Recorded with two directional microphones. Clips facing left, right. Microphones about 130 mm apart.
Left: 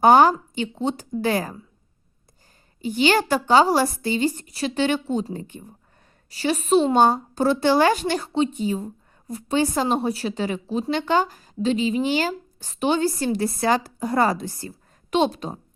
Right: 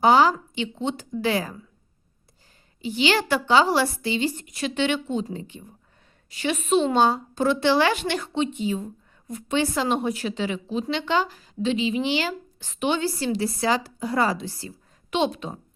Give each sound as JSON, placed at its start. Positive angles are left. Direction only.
{"t": 0.0, "sound": "a woman's voice", "side_deg": 50}
{"t": 2.8, "sound": "a woman's voice", "side_deg": 45}
{"t": 6.3, "sound": "speech", "side_deg": 35}